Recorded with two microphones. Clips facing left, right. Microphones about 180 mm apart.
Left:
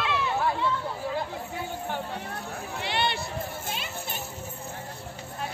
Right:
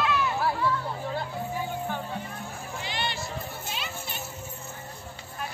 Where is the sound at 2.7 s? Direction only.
65° left (ahead or behind).